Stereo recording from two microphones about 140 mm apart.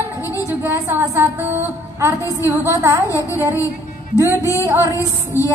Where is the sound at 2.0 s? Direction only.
20° right (ahead or behind).